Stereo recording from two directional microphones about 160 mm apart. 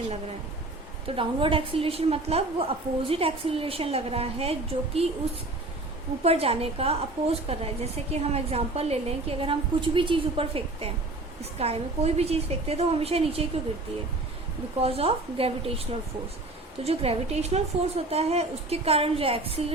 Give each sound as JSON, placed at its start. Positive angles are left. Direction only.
{"t": 1.0, "sound": "a woman's voice", "side_deg": -35}
{"t": 6.2, "sound": "a woman's voice", "side_deg": -40}
{"t": 14.8, "sound": "a woman's voice", "side_deg": -40}